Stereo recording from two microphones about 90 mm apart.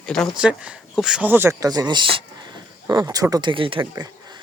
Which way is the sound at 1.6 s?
45° right (ahead or behind).